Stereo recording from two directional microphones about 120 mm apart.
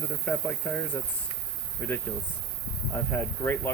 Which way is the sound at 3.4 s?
15° left (ahead or behind).